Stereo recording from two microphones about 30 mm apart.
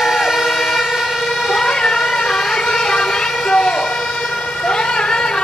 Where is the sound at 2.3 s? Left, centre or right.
Centre.